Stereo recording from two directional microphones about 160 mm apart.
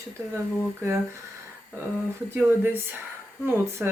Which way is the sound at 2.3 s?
15° right (ahead or behind).